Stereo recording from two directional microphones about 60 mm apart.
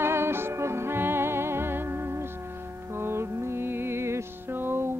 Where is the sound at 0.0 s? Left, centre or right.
Right.